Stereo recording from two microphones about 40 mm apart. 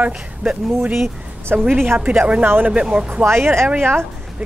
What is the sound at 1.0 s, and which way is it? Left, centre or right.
Speech, right.